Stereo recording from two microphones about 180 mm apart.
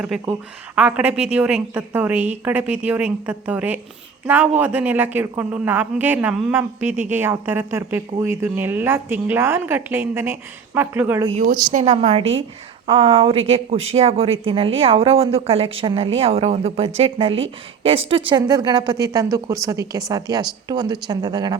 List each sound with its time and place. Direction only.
0.0 s a woman's voice: 5° right (ahead or behind)
11.7 s a woman's voice: 40° right (ahead or behind); by 21.6 s 20° right (ahead or behind)